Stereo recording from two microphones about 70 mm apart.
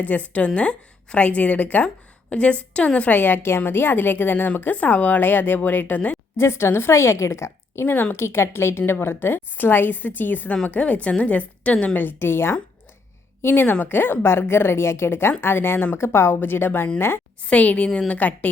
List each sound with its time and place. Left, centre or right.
0.0 s a woman's voice: left
6.3 s a woman's voice: left; by 11.9 s centre
11.9 s a woman's voice: left
17.4 s a woman's voice: centre